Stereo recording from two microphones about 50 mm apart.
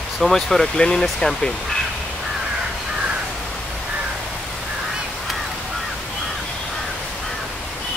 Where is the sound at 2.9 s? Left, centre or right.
Centre.